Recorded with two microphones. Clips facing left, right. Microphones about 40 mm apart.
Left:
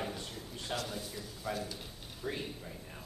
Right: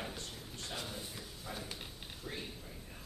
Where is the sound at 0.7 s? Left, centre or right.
Left.